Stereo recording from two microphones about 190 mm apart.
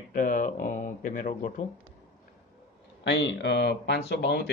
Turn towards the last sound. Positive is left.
turn(degrees=60)  # may be behind; listen again after turning